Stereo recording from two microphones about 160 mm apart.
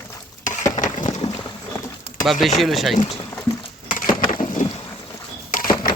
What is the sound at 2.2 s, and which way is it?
Speech, centre (ahead or behind).